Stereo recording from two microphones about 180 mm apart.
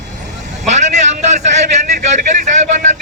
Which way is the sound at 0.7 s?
40° right (ahead or behind).